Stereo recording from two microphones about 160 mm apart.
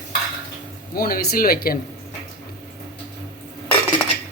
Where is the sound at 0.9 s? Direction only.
65° left (ahead or behind).